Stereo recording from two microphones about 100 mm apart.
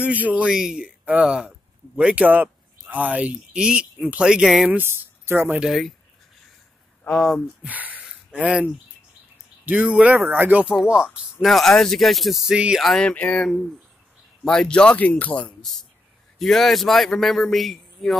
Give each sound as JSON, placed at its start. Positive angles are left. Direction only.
{"t": 0.0, "sound": "speech", "side_deg": -15}
{"t": 4.6, "sound": "speech", "side_deg": -20}
{"t": 5.6, "sound": "a man's voice", "side_deg": 0}
{"t": 7.1, "sound": "a man's voice", "side_deg": 0}
{"t": 7.6, "sound": "a sound", "side_deg": -15}
{"t": 9.7, "sound": "a man's voice", "side_deg": -10}
{"t": 12.8, "sound": "a man's voice", "side_deg": 5}
{"t": 15.6, "sound": "a man's voice", "side_deg": 5}